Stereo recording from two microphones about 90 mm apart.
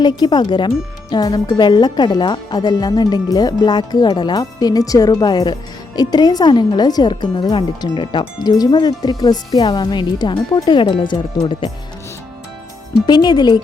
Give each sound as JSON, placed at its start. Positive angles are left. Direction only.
{"t": 0.0, "sound": "speech", "side_deg": 50}
{"t": 13.1, "sound": "speech", "side_deg": 55}